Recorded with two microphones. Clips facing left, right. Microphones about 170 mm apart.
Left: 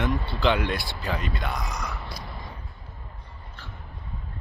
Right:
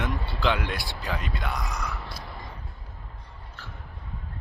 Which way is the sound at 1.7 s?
15° left (ahead or behind).